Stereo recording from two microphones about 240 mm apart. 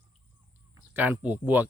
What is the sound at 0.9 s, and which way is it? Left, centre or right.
Speech, centre.